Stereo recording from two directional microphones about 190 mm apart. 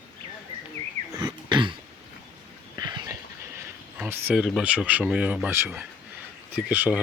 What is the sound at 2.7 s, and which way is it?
Dog, 20° right (ahead or behind).